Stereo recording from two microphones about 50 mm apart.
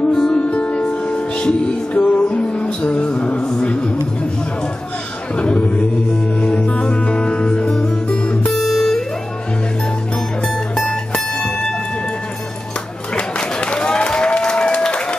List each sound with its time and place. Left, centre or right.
0.1 s music: centre
0.4 s music: left
3.3 s a sound: centre
5.3 s music: left
8.5 s music: centre
13.1 s applause: centre